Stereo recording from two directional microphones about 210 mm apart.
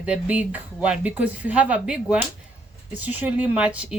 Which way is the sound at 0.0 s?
5° right (ahead or behind).